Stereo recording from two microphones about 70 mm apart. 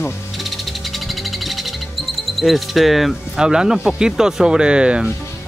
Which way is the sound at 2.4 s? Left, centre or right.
Centre.